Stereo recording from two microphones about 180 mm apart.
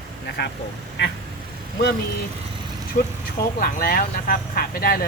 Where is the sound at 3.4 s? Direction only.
55° left (ahead or behind).